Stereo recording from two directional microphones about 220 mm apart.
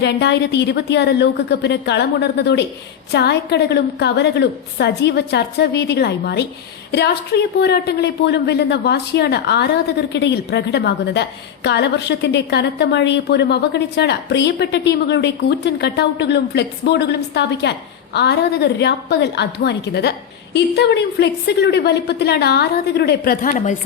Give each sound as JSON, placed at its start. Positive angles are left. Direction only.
{"t": 0.0, "sound": "a woman's voice", "side_deg": 50}